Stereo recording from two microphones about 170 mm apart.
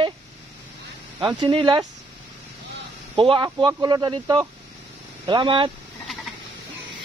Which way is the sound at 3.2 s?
30° right (ahead or behind).